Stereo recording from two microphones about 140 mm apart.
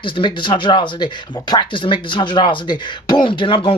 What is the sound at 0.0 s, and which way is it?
Speech, 35° left (ahead or behind).